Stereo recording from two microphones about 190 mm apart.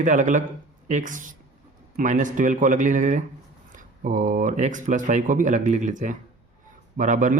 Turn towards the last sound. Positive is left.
turn(degrees=-45)  # may be behind; listen again after turning